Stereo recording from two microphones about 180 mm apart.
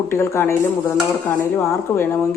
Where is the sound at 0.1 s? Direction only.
15° left (ahead or behind).